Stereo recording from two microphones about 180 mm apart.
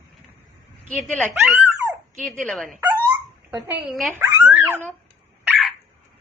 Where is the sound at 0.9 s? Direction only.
10° left (ahead or behind).